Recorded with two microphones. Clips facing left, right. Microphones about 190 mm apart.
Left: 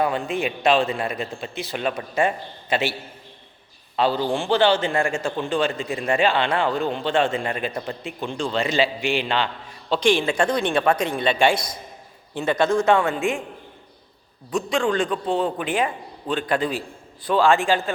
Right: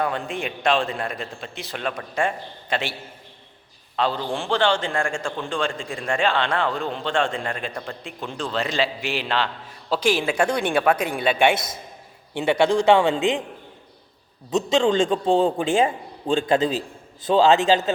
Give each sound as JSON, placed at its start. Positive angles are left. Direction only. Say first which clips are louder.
{"t": 0.0, "sound": "a man's voice", "louder": "left 3 dB", "side_deg": 5}
{"t": 3.9, "sound": "a man's voice", "louder": "left 3 dB", "side_deg": 5}
{"t": 12.4, "sound": "speech", "louder": "right 1 dB", "side_deg": -15}
{"t": 14.5, "sound": "a man's voice", "louder": "right 3 dB", "side_deg": -25}